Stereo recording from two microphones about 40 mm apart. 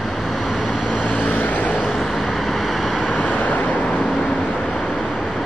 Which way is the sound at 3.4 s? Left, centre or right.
Left.